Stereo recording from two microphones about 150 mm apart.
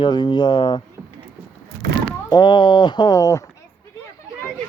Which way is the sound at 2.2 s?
30° left (ahead or behind).